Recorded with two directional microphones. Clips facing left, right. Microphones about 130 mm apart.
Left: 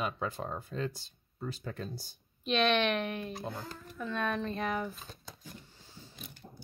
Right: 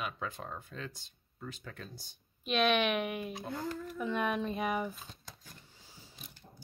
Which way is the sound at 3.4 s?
25° left (ahead or behind).